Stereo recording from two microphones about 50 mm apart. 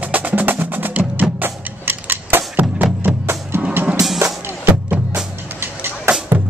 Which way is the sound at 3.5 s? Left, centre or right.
Right.